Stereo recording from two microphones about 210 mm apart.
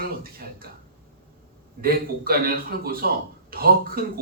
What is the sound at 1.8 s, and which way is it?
Speech, 45° right (ahead or behind).